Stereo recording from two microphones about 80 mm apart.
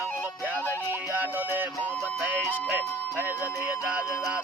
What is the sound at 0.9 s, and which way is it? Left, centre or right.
Music, right.